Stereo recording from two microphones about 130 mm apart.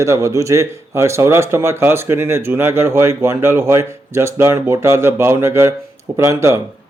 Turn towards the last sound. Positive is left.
turn(degrees=-20)  # may be behind; listen again after turning